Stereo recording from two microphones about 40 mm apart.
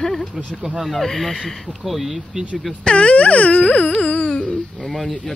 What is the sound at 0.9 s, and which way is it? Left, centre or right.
Speech, centre.